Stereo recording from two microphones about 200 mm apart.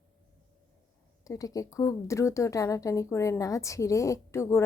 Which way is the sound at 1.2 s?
15° left (ahead or behind).